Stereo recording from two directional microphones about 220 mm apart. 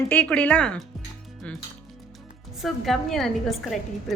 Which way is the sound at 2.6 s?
Centre (ahead or behind).